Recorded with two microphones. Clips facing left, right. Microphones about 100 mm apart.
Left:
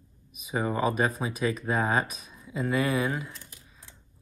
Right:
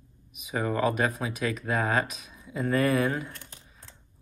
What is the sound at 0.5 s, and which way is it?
Speech, 20° left (ahead or behind).